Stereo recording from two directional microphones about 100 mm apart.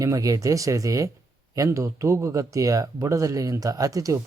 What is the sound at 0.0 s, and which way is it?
Speech, 35° right (ahead or behind).